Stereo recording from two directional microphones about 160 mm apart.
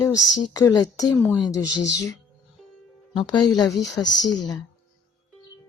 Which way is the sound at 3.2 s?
30° left (ahead or behind).